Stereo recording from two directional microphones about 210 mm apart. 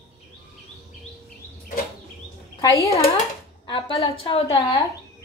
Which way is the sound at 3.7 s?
25° left (ahead or behind).